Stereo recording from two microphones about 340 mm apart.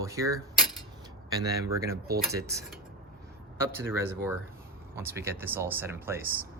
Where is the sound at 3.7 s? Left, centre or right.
Centre.